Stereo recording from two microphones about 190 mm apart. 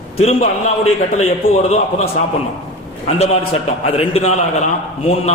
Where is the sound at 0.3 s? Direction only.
35° left (ahead or behind).